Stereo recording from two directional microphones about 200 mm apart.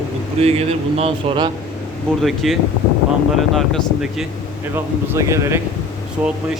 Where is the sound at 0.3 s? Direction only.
30° right (ahead or behind).